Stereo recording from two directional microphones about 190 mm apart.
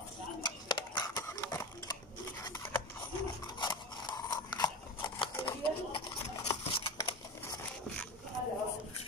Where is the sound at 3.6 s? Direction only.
25° left (ahead or behind).